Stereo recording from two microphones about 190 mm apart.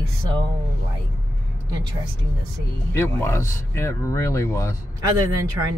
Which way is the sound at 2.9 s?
15° left (ahead or behind).